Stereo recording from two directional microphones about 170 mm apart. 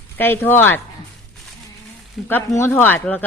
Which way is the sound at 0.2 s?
10° left (ahead or behind).